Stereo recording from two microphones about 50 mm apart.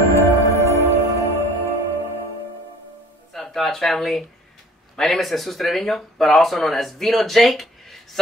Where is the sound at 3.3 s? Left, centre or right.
Centre.